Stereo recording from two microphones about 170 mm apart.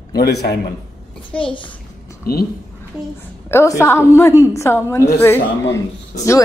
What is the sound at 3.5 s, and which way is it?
Speech, 15° left (ahead or behind).